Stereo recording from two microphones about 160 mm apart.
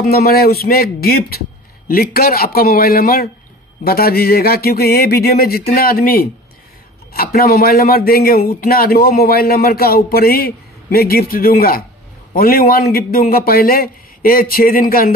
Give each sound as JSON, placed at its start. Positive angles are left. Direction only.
{"t": 0.0, "sound": "a man's voice", "side_deg": 70}